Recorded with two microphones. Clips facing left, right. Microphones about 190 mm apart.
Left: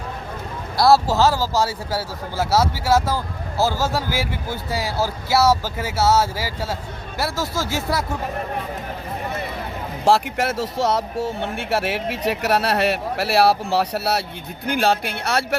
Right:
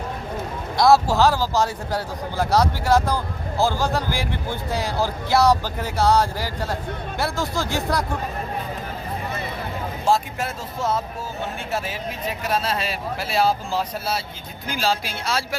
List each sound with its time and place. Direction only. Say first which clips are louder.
0.8 s speech: left 1 dB; 5° left (ahead or behind)
10.0 s speech: left 4 dB; 75° left (ahead or behind)